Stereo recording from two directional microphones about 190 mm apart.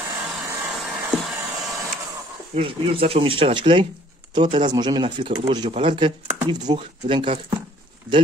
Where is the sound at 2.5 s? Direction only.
30° right (ahead or behind).